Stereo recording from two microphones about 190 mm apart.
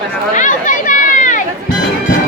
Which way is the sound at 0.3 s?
40° left (ahead or behind).